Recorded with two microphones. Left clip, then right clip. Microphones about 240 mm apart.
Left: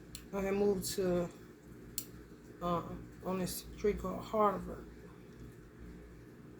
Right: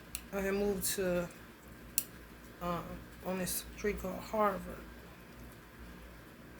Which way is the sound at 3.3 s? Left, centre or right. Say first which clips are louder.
Right 1 dB; centre.